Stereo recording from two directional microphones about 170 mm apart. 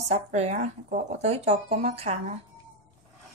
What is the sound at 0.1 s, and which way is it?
Speech, 40° right (ahead or behind).